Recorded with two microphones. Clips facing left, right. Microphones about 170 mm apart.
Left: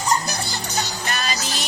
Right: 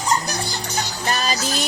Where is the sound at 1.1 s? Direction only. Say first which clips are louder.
Right 4 dB; 40° right (ahead or behind).